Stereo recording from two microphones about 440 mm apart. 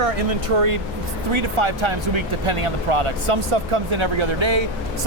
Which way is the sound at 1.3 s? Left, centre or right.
Right.